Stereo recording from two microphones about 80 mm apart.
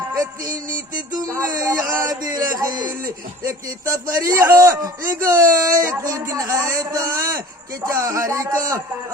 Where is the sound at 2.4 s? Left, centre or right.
Right.